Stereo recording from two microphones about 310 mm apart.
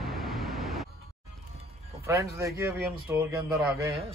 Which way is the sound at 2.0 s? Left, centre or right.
Centre.